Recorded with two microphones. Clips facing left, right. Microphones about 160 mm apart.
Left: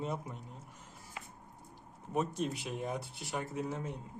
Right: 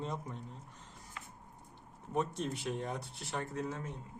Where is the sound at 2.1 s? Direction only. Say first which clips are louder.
Left 1 dB; 5° left (ahead or behind).